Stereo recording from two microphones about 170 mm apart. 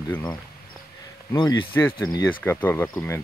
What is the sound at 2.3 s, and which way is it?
Speech, 10° left (ahead or behind).